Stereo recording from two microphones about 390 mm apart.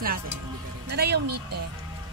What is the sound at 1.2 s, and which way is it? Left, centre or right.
Speech, right.